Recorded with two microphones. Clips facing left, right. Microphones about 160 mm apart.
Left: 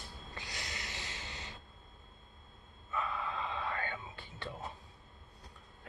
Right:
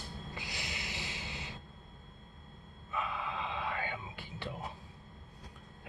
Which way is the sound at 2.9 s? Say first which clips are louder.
Even; 15° right (ahead or behind).